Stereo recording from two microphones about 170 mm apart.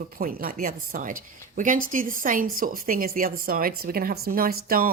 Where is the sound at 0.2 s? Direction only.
55° right (ahead or behind).